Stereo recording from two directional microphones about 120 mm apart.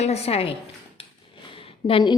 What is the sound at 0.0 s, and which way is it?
Speech, 60° left (ahead or behind).